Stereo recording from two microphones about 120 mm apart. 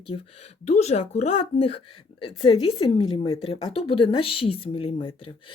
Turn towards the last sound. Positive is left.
turn(degrees=50)  # may be behind; listen again after turning